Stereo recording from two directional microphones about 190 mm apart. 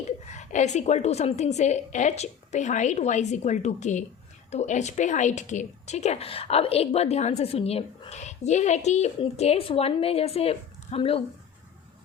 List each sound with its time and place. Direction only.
0.0 s a woman's voice: 40° left (ahead or behind)